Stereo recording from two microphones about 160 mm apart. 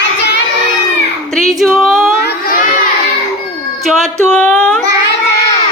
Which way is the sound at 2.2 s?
65° left (ahead or behind).